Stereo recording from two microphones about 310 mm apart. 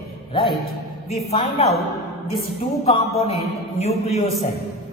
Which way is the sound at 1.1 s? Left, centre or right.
Centre.